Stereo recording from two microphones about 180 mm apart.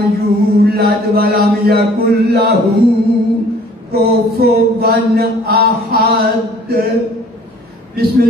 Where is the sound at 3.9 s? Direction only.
60° right (ahead or behind).